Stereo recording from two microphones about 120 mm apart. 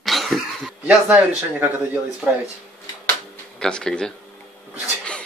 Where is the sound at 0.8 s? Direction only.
15° right (ahead or behind).